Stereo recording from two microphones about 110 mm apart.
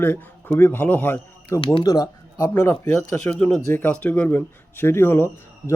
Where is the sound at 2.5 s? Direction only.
20° left (ahead or behind).